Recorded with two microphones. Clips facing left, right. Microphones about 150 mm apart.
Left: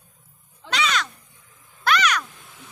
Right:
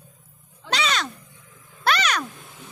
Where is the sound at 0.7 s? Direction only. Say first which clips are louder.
Even; 30° right (ahead or behind).